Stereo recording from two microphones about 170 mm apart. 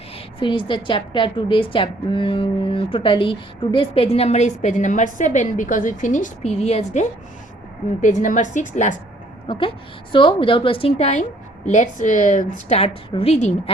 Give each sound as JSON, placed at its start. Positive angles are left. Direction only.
{"t": 0.3, "sound": "a woman's voice", "side_deg": 30}
{"t": 9.5, "sound": "a woman's voice", "side_deg": 30}